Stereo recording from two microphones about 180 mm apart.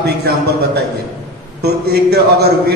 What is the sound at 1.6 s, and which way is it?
Speech, 65° right (ahead or behind).